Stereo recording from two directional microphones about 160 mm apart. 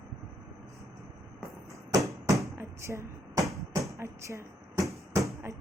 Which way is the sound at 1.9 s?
20° right (ahead or behind).